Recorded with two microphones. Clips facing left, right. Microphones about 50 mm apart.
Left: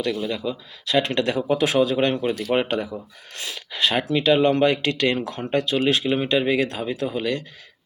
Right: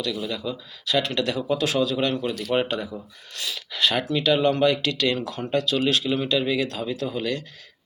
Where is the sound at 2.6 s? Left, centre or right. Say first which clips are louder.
Left 2 dB; left.